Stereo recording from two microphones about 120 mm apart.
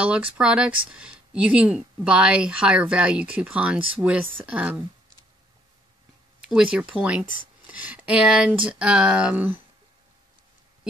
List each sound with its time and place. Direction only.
0.0 s speech: 10° right (ahead or behind)
6.4 s speech: 5° right (ahead or behind)